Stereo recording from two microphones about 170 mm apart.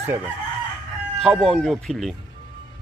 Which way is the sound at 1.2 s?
Centre (ahead or behind).